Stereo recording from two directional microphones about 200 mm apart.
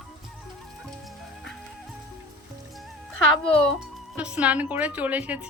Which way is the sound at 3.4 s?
5° left (ahead or behind).